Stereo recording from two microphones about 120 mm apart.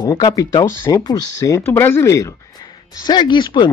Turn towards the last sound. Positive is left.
turn(degrees=40)  # may be behind; listen again after turning